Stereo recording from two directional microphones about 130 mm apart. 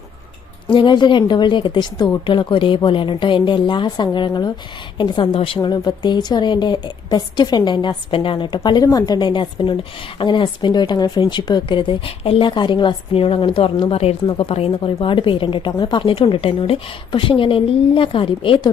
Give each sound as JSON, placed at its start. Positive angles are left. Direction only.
{"t": 0.7, "sound": "a woman's voice", "side_deg": 40}